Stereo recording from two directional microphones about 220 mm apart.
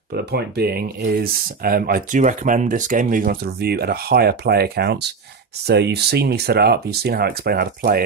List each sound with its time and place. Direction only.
0.1 s speech: 45° right (ahead or behind)